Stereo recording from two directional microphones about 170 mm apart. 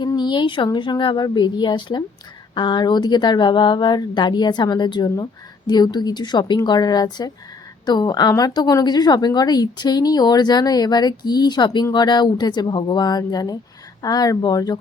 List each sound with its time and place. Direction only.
0.0 s a woman's voice: 25° left (ahead or behind)